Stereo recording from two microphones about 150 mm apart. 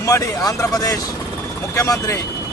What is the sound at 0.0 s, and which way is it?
Speech, 20° left (ahead or behind).